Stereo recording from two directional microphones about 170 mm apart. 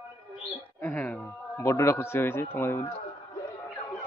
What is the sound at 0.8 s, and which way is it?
A man's voice, 10° left (ahead or behind).